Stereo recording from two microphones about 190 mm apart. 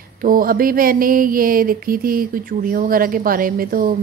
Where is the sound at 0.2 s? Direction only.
50° right (ahead or behind).